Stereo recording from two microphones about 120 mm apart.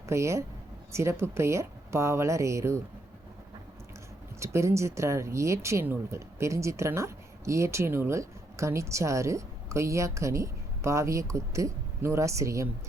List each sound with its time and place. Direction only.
0.0 s speech: 25° right (ahead or behind)
4.4 s speech: 25° right (ahead or behind)